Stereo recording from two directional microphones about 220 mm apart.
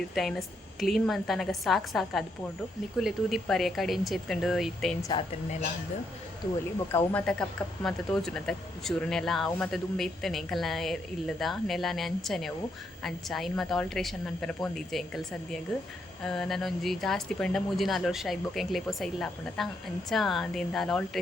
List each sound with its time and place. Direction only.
0.1 s speech: centre (ahead or behind)
6.9 s speech: 5° left (ahead or behind)